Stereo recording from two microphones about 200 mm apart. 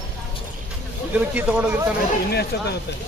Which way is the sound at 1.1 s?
5° right (ahead or behind).